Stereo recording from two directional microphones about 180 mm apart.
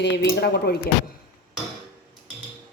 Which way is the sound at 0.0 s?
65° left (ahead or behind).